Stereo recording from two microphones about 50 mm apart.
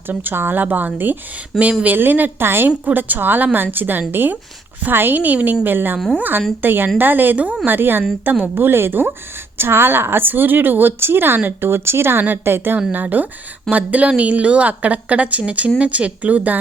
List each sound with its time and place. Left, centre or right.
0.1 s a woman's voice: right
2.6 s a woman's voice: right
12.9 s a woman's voice: right